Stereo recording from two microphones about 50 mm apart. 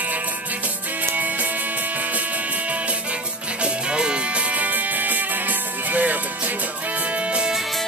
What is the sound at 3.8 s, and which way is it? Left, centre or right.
Music, centre.